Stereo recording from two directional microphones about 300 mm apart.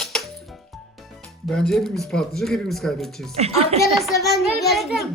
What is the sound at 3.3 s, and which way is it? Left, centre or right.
Speech, right.